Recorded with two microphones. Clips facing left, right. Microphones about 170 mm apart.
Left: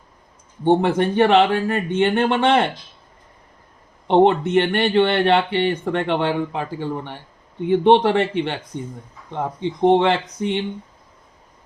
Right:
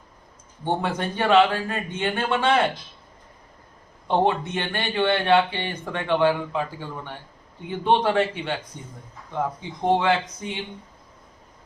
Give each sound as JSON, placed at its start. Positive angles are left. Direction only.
{"t": 0.8, "sound": "speech", "side_deg": 65}
{"t": 4.1, "sound": "a man's voice", "side_deg": 65}